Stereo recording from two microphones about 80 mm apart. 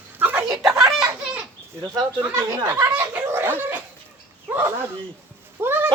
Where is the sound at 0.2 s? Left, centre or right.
Right.